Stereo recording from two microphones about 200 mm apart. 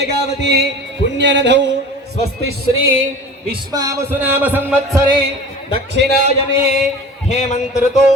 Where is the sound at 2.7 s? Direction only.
85° right.